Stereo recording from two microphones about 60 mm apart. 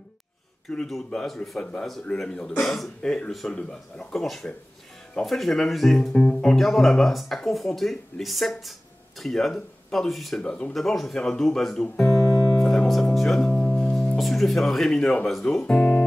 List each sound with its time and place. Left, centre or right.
0.7 s speech: centre
10.4 s speech: centre
10.7 s speech: centre
12.3 s music: left
13.1 s speech: centre
13.6 s music: centre
15.4 s speech: centre